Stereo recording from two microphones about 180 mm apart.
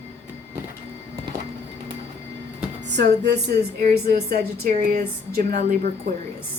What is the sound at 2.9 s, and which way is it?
Speech, 70° right (ahead or behind).